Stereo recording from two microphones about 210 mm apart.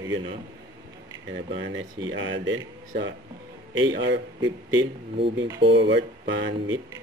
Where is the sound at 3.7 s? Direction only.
65° right (ahead or behind).